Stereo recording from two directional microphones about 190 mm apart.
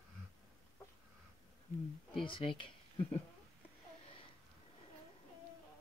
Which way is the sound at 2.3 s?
25° left (ahead or behind).